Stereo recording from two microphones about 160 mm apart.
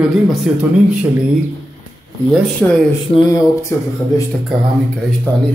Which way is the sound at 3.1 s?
20° left (ahead or behind).